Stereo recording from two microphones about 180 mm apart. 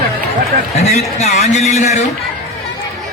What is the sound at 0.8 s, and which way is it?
A man's voice, 35° left (ahead or behind).